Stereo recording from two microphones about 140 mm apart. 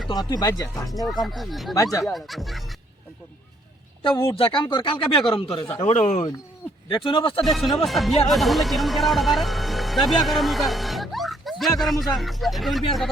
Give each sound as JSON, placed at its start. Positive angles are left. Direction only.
{"t": 0.1, "sound": "speech", "side_deg": 30}
{"t": 1.0, "sound": "speech", "side_deg": 0}
{"t": 1.7, "sound": "speech", "side_deg": 25}
{"t": 2.1, "sound": "speech", "side_deg": 0}
{"t": 4.3, "sound": "speech", "side_deg": 40}
{"t": 5.6, "sound": "speech", "side_deg": 15}
{"t": 5.9, "sound": "speech", "side_deg": 60}
{"t": 6.9, "sound": "speech", "side_deg": 35}
{"t": 7.4, "sound": "speech", "side_deg": 0}